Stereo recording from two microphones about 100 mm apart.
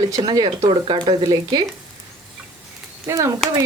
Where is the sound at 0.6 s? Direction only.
55° right (ahead or behind).